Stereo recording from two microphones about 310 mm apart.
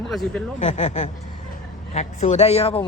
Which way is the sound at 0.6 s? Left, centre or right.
Left.